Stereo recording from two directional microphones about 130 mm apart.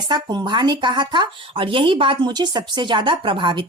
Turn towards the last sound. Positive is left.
turn(degrees=-40)  # may be behind; listen again after turning